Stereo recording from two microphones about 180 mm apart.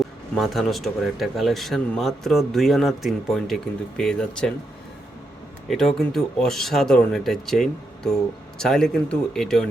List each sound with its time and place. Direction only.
0.0 s speech: centre (ahead or behind)
5.7 s speech: 5° left (ahead or behind)